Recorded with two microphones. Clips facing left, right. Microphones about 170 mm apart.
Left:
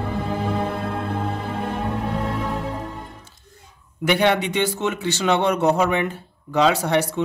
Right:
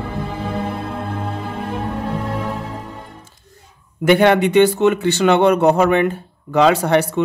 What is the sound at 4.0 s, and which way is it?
Speech, 50° right (ahead or behind).